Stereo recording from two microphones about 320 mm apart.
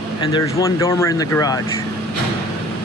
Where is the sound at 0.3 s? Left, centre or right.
Centre.